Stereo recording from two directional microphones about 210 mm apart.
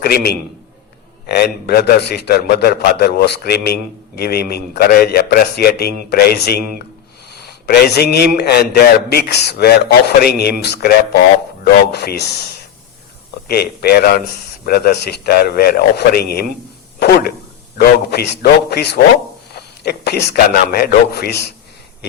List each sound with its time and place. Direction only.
0.0 s a man's voice: 45° left (ahead or behind)
13.5 s a man's voice: 50° left (ahead or behind)